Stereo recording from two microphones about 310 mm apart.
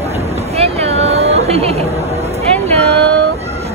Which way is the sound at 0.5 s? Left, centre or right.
Centre.